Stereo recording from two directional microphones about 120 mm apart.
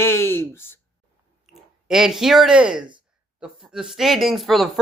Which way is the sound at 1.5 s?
Centre (ahead or behind).